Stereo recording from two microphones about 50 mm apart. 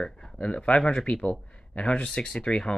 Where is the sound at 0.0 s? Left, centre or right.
Centre.